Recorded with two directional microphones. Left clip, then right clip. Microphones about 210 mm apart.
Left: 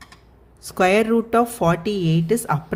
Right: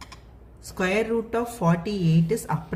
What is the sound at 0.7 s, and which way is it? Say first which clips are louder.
A woman's voice: left 7 dB; 45° left (ahead or behind).